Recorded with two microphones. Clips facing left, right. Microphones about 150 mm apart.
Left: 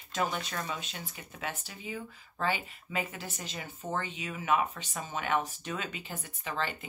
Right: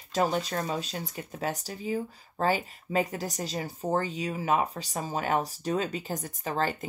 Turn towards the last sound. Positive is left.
turn(degrees=-40)  # may be behind; listen again after turning